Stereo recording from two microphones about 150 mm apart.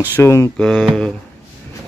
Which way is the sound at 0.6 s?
5° left (ahead or behind).